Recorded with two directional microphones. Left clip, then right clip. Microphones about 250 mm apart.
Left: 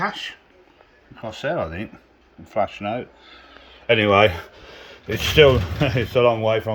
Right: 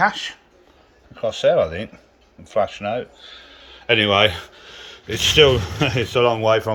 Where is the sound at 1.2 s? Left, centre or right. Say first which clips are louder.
Right 8 dB; centre.